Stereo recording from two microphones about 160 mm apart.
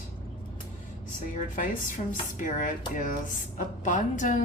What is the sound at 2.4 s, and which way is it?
A woman's voice, 55° left (ahead or behind).